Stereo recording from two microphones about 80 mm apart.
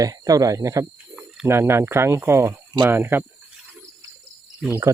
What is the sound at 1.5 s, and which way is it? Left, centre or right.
Speech, right.